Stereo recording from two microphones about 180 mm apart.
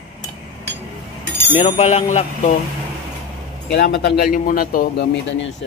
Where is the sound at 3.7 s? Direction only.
65° left (ahead or behind).